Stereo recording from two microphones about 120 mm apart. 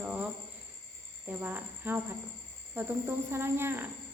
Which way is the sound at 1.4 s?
15° right (ahead or behind).